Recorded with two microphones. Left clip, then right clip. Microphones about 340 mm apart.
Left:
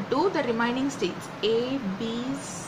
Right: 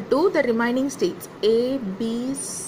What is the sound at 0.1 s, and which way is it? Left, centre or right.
Speech, right.